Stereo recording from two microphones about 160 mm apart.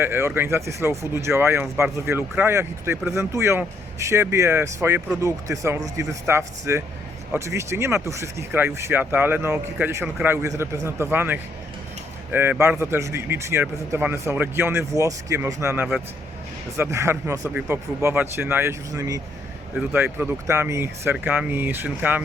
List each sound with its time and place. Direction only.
0.0 s speech: 15° right (ahead or behind)